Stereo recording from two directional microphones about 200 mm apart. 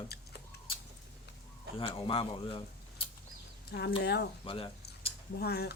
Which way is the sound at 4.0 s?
55° left (ahead or behind).